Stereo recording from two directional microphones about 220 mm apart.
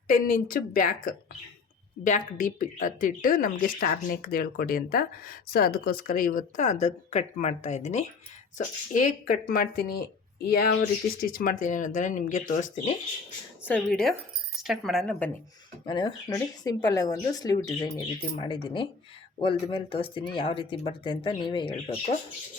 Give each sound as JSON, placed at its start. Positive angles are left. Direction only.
{"t": 0.1, "sound": "a woman's voice", "side_deg": 40}
{"t": 13.7, "sound": "speech", "side_deg": 5}
{"t": 15.9, "sound": "speech", "side_deg": 20}